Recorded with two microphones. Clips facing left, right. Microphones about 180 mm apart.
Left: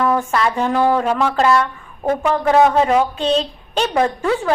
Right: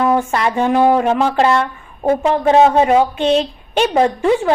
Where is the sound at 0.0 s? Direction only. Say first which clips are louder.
Right 2 dB; 20° right (ahead or behind).